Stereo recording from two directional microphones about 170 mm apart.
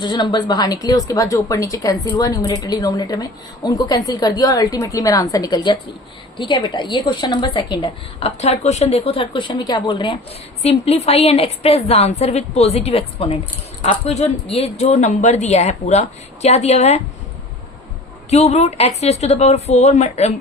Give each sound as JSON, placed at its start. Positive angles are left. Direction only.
{"t": 0.0, "sound": "a woman's voice", "side_deg": 25}
{"t": 8.4, "sound": "speech", "side_deg": 40}
{"t": 10.6, "sound": "speech", "side_deg": 35}
{"t": 18.3, "sound": "speech", "side_deg": 40}